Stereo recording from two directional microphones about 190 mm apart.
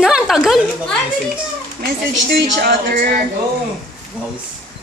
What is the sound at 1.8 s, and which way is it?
Speech, 55° right (ahead or behind).